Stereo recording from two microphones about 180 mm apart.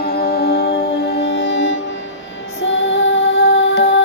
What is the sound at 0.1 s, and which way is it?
Music, 55° left (ahead or behind).